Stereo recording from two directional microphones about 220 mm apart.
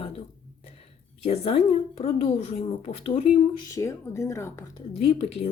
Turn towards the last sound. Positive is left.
turn(degrees=30)  # may be behind; listen again after turning